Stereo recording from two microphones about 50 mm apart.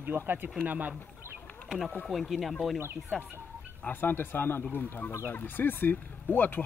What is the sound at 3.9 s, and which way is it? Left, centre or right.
Speech, left.